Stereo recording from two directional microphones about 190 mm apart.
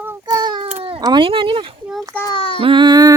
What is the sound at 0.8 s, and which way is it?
Speech, 25° right (ahead or behind).